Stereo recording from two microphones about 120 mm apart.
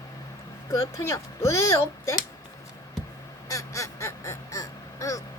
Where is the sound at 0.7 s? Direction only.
25° left (ahead or behind).